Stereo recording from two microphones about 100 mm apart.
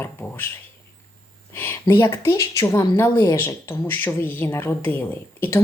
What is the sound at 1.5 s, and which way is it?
Speech, 25° left (ahead or behind).